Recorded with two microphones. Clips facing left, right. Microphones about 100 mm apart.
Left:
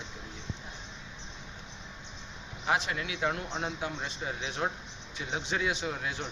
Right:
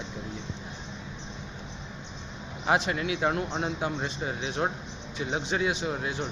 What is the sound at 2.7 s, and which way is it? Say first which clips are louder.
Speech: right 8 dB; 55° right (ahead or behind).